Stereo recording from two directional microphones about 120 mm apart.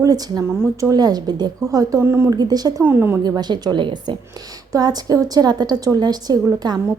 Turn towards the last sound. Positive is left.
turn(degrees=-35)  # may be behind; listen again after turning